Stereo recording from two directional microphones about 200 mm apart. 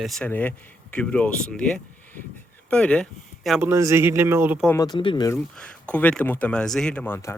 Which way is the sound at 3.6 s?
15° right (ahead or behind).